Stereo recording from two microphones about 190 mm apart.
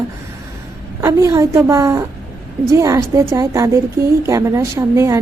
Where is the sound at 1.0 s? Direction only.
15° right (ahead or behind).